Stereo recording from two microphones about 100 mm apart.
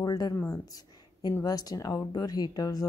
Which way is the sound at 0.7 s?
45° left (ahead or behind).